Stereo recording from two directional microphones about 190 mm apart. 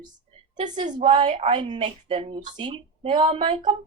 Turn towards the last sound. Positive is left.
turn(degrees=-25)  # may be behind; listen again after turning